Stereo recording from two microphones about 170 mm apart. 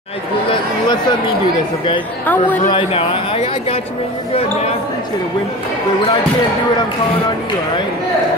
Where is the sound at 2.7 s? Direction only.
35° left (ahead or behind).